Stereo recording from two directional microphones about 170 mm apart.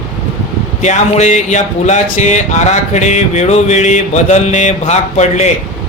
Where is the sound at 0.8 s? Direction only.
45° left (ahead or behind).